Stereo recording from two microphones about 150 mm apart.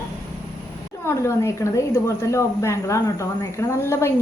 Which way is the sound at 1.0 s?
20° left (ahead or behind).